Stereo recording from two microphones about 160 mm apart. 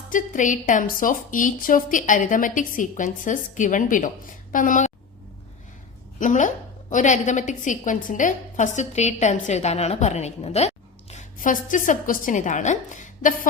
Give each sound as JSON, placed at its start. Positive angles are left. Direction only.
{"t": 0.1, "sound": "a woman's voice", "side_deg": 55}
{"t": 6.1, "sound": "a woman's voice", "side_deg": 50}